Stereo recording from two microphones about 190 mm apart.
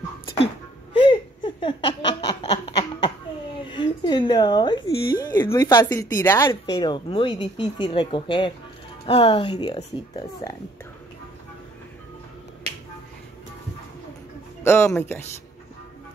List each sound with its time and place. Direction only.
0.9 s laughter: 25° left (ahead or behind)
3.5 s a sound: 25° left (ahead or behind)
5.3 s a woman's voice: 15° left (ahead or behind)
14.6 s speech: 15° left (ahead or behind)